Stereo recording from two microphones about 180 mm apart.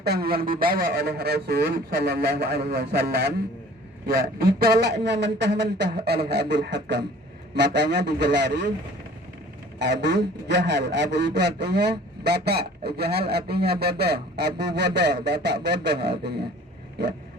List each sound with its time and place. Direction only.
0.0 s a man's voice: 60° right (ahead or behind)
9.7 s a man's voice: 70° right (ahead or behind)